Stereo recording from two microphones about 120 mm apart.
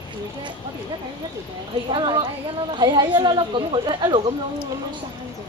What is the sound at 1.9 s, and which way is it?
Speech, 40° right (ahead or behind).